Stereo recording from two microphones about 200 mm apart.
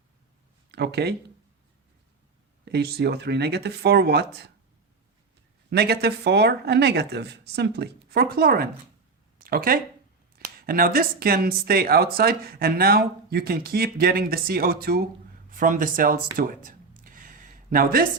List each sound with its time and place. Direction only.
0.7 s speech: 55° right (ahead or behind)
2.6 s speech: 55° right (ahead or behind)
5.7 s speech: 55° right (ahead or behind)
15.4 s a sound: 40° right (ahead or behind)